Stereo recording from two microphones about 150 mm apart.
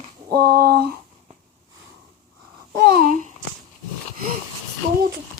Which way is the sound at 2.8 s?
80° right.